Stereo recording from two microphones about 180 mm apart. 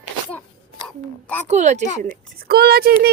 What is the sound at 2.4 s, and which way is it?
Speech, 60° right (ahead or behind).